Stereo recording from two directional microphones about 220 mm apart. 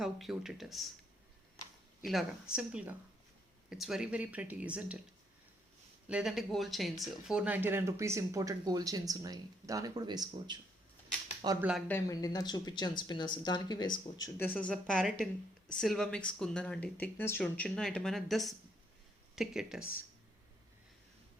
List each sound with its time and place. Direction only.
0.0 s speech: centre (ahead or behind)
2.0 s speech: centre (ahead or behind)
6.1 s speech: 5° right (ahead or behind); by 11.6 s 20° right (ahead or behind)
11.9 s speech: 15° left (ahead or behind)
14.3 s speech: 5° left (ahead or behind)